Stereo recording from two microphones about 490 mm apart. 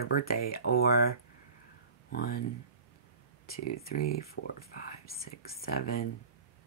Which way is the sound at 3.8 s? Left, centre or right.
Centre.